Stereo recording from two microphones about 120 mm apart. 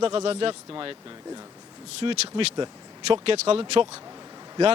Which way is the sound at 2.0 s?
50° right (ahead or behind).